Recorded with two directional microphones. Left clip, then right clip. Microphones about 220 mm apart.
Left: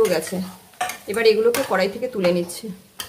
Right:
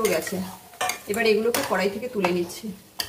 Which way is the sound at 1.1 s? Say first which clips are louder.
Left 5 dB; 45° left (ahead or behind).